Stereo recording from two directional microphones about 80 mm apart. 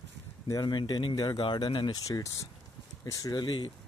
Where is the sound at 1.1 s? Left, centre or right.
Left.